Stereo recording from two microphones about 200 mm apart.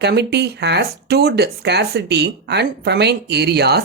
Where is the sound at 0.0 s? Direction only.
55° right (ahead or behind).